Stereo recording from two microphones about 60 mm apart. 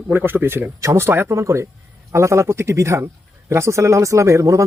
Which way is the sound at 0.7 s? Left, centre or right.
Right.